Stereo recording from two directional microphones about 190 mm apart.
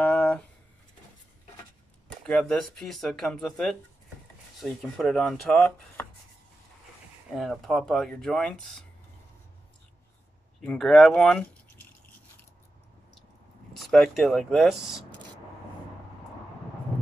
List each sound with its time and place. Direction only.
0.0 s a sound: 10° left (ahead or behind)
2.2 s speech: 5° left (ahead or behind)
7.2 s speech: centre (ahead or behind)
10.6 s speech: 5° left (ahead or behind)
13.7 s speech: centre (ahead or behind)